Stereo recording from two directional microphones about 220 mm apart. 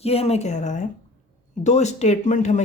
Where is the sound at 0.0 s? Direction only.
30° left (ahead or behind).